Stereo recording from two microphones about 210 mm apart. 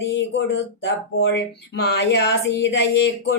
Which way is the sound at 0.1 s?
60° left (ahead or behind).